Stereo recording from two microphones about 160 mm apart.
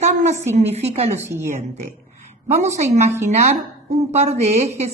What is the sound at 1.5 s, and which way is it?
A woman's voice, 50° right (ahead or behind).